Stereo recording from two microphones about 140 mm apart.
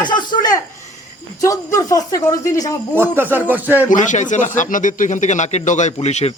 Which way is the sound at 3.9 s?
65° left (ahead or behind).